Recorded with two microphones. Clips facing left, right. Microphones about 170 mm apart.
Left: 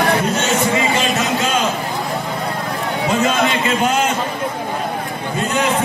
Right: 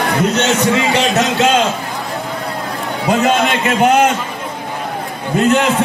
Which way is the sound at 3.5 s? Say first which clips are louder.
Right 5 dB; 65° right (ahead or behind).